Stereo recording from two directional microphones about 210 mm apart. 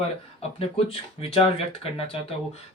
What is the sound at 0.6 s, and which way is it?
Speech, 25° left (ahead or behind).